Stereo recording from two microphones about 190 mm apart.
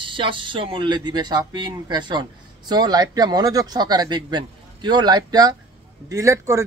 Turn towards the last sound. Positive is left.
turn(degrees=-15)  # may be behind; listen again after turning